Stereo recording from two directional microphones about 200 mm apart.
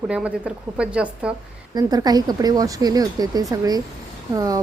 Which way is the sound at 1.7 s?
20° right (ahead or behind).